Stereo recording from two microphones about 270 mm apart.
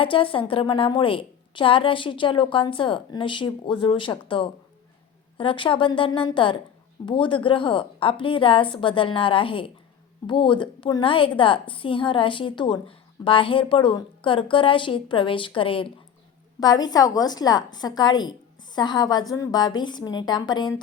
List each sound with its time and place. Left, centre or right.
0.0 s a woman's voice: centre